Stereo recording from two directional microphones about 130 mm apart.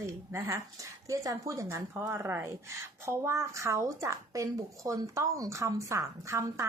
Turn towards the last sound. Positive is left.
turn(degrees=-20)  # may be behind; listen again after turning